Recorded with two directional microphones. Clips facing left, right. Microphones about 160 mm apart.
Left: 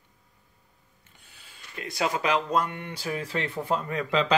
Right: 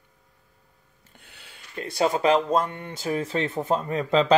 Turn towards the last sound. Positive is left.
turn(degrees=-35)  # may be behind; listen again after turning